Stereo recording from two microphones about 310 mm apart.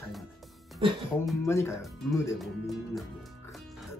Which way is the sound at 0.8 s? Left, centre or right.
Centre.